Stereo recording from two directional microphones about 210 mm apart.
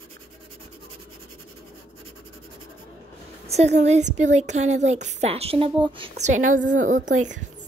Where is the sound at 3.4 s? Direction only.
30° right (ahead or behind).